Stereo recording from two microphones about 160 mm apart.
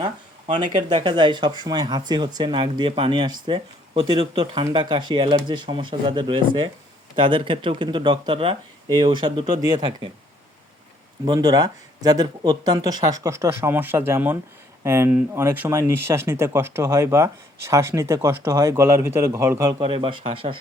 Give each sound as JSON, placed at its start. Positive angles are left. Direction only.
{"t": 0.0, "sound": "speech", "side_deg": -30}
{"t": 11.3, "sound": "speech", "side_deg": -25}
{"t": 19.8, "sound": "speech", "side_deg": -30}